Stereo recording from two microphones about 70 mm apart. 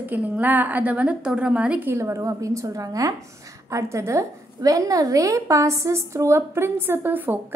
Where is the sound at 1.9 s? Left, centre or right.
Right.